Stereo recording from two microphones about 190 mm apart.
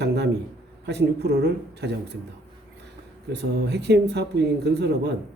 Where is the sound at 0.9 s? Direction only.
60° right (ahead or behind).